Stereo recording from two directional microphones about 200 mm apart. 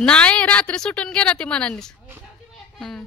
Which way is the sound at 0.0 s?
5° left (ahead or behind).